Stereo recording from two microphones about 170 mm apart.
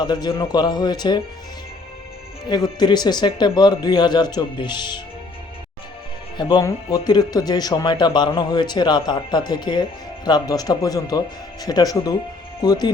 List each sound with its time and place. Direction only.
0.0 s speech: 25° left (ahead or behind)
2.5 s speech: 25° left (ahead or behind)
6.3 s speech: 25° left (ahead or behind)